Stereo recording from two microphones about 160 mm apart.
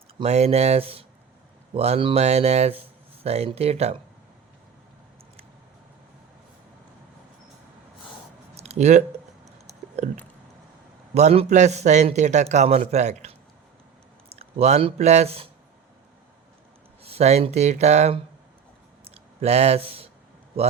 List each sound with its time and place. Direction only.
0.2 s speech: 40° right (ahead or behind)
8.5 s a sound: 40° right (ahead or behind)
11.1 s a man's voice: 45° right (ahead or behind)
14.3 s speech: 40° right (ahead or behind)
17.0 s a man's voice: 40° right (ahead or behind)
19.0 s a sound: 40° right (ahead or behind)